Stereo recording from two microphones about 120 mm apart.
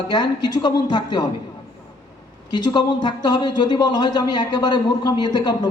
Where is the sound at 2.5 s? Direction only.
40° left (ahead or behind).